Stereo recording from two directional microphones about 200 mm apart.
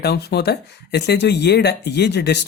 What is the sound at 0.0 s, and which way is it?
Speech, 55° left (ahead or behind).